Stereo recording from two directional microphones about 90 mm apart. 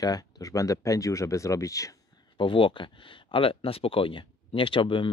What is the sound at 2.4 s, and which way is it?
Speech, 70° left (ahead or behind).